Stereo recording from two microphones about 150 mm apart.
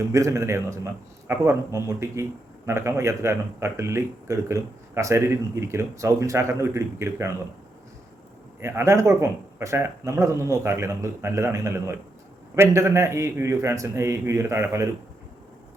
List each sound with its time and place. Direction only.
0.1 s speech: 20° right (ahead or behind)
8.6 s speech: 20° right (ahead or behind)